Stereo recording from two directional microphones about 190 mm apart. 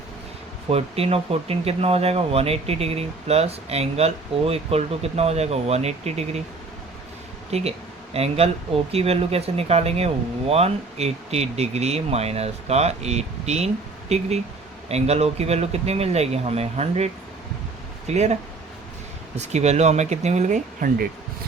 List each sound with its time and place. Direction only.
0.7 s speech: 30° right (ahead or behind)
7.5 s speech: 35° right (ahead or behind)
18.1 s speech: 35° right (ahead or behind)
19.4 s speech: 35° right (ahead or behind)